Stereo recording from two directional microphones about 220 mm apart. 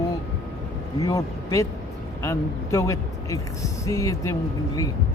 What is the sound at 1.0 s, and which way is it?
Speech, 15° left (ahead or behind).